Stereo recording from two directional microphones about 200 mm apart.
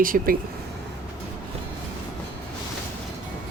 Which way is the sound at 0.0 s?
45° right (ahead or behind).